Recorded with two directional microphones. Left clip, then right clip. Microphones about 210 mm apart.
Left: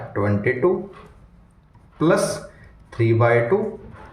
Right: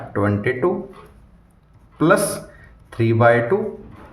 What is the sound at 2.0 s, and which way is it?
Speech, 35° right (ahead or behind).